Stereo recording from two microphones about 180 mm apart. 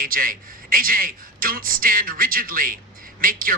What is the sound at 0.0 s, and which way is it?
A man's voice, 50° right (ahead or behind).